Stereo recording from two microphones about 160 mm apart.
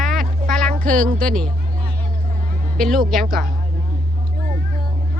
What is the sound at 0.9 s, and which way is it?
Speech, 55° right (ahead or behind).